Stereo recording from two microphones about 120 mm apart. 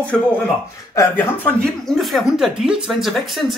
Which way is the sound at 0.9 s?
15° left (ahead or behind).